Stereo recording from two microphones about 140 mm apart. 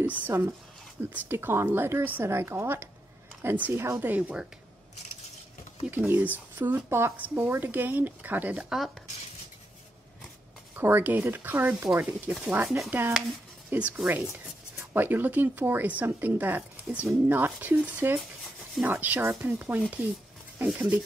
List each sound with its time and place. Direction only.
0.0 s speech: 15° right (ahead or behind)
5.9 s speech: 15° right (ahead or behind)
10.8 s speech: 15° right (ahead or behind)